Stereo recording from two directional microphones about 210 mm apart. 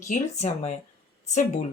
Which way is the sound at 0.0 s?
35° left (ahead or behind).